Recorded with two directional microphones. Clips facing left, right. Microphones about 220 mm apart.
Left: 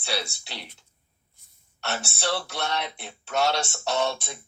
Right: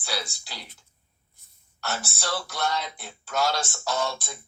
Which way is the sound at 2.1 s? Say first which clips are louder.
Left 4 dB; 25° left (ahead or behind).